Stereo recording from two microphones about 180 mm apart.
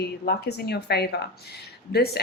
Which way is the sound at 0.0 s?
65° left (ahead or behind).